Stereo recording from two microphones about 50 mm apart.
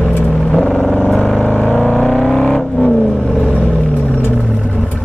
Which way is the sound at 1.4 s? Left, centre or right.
Left.